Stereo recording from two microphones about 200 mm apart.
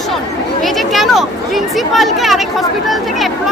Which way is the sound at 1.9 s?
Centre (ahead or behind).